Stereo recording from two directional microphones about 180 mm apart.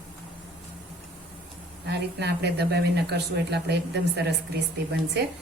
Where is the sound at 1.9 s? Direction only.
65° right (ahead or behind).